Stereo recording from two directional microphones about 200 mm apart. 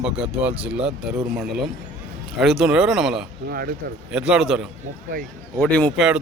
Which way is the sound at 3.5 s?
50° right (ahead or behind).